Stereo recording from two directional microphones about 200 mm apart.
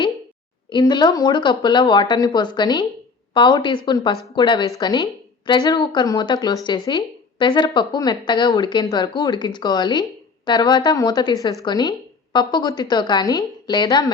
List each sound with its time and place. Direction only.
0.7 s speech: 20° left (ahead or behind)